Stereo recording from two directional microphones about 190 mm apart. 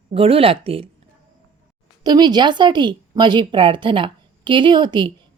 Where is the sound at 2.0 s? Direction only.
20° right (ahead or behind).